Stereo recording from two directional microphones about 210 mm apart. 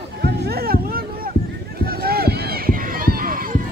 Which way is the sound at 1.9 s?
45° right (ahead or behind).